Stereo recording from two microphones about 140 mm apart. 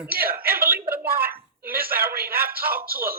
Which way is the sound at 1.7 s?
90° right.